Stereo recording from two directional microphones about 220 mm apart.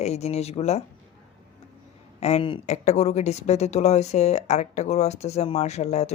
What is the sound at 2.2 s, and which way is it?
Speech, 25° left (ahead or behind).